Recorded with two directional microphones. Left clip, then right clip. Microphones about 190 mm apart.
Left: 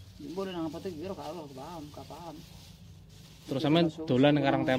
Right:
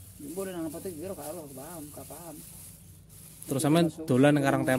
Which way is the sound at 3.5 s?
40° right (ahead or behind).